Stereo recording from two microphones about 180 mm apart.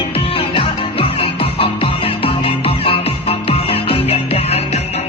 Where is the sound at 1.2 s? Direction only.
30° left (ahead or behind).